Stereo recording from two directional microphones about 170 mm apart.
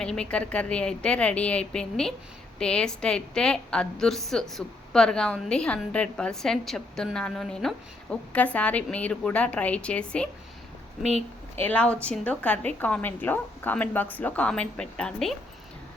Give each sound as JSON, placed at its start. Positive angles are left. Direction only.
{"t": 0.0, "sound": "a woman's voice", "side_deg": 5}
{"t": 11.5, "sound": "a woman's voice", "side_deg": 10}